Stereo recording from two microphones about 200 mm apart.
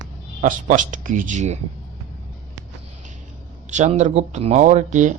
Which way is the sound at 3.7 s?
35° right (ahead or behind).